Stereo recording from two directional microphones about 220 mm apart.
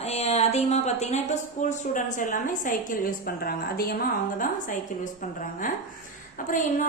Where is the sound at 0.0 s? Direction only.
30° left (ahead or behind).